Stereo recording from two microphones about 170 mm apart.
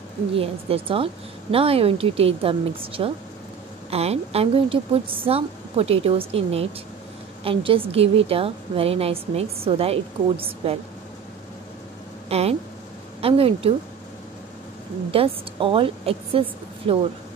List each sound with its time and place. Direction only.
0.3 s a woman's voice: 35° right (ahead or behind)
12.3 s a woman's voice: 40° right (ahead or behind)
15.0 s a woman's voice: 35° right (ahead or behind)